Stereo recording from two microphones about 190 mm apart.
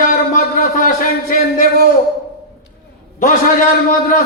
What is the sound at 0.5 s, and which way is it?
Speech, 45° left (ahead or behind).